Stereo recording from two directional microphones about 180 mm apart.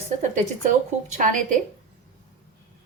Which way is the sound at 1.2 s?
45° right (ahead or behind).